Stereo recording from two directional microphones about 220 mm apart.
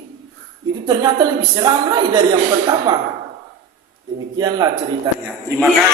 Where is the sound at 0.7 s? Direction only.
20° right (ahead or behind).